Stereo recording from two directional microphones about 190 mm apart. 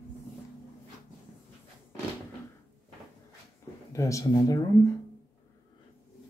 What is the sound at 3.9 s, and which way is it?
Speech, 15° left (ahead or behind).